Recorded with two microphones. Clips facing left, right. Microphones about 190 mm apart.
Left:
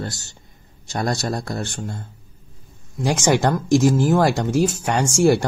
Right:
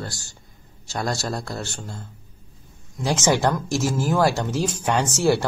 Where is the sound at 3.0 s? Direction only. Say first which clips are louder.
Left 2 dB; 15° left (ahead or behind).